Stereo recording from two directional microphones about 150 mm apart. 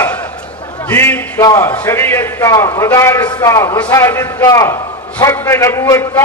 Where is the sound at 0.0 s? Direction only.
10° left (ahead or behind).